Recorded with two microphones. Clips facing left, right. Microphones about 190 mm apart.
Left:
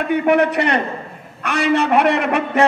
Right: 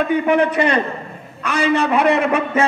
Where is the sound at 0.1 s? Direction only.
65° left (ahead or behind).